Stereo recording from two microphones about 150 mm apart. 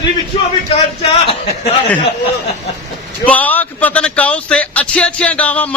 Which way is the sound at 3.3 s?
10° left (ahead or behind).